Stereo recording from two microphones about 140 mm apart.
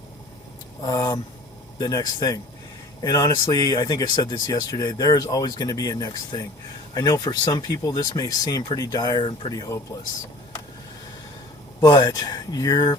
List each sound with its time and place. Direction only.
0.8 s speech: 25° left (ahead or behind)
11.8 s speech: 30° left (ahead or behind)